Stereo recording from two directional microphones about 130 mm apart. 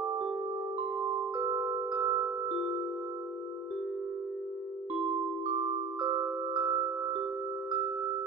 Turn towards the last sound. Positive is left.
turn(degrees=-35)  # may be behind; listen again after turning